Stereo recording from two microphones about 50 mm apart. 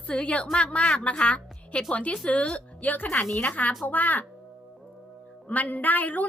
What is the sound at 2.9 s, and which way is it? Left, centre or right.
A woman's voice, left.